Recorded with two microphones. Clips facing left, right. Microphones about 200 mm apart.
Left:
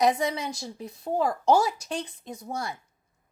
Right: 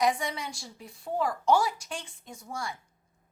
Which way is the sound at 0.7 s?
40° left (ahead or behind).